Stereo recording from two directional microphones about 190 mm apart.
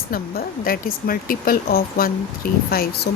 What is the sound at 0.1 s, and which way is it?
Speech, 50° left (ahead or behind).